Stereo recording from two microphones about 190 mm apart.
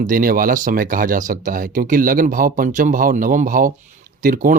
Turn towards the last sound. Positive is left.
turn(degrees=-45)  # may be behind; listen again after turning